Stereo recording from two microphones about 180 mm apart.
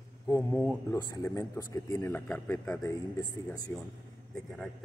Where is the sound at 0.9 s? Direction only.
20° left (ahead or behind).